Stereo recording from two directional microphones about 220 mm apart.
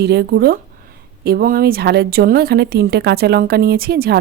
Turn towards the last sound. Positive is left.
turn(degrees=-45)  # may be behind; listen again after turning